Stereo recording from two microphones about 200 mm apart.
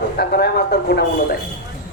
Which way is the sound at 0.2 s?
50° left (ahead or behind).